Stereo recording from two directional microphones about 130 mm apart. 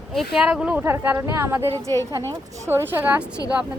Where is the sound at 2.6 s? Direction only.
15° right (ahead or behind).